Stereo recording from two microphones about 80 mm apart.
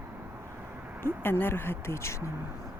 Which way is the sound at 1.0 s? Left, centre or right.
Left.